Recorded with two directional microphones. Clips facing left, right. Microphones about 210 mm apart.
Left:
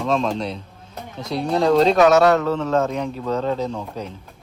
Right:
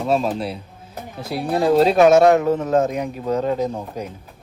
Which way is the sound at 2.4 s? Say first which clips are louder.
Right 2 dB; 50° right (ahead or behind).